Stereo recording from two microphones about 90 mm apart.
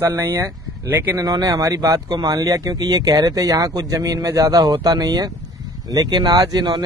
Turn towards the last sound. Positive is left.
turn(degrees=-50)  # may be behind; listen again after turning